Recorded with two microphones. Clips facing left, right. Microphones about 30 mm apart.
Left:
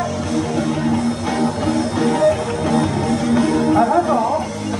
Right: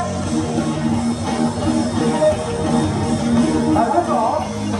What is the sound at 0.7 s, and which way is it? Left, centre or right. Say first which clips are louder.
Music: left 1 dB; centre.